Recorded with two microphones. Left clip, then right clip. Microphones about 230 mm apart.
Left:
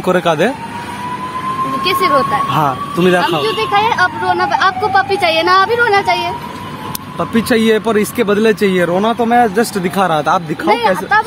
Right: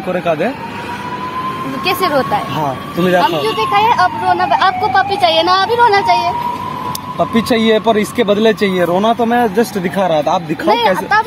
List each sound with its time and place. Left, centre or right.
0.1 s speech: left
1.9 s speech: centre
2.5 s speech: left
3.4 s speech: centre
7.3 s speech: left
9.0 s speech: centre; by 10.4 s left
10.6 s speech: centre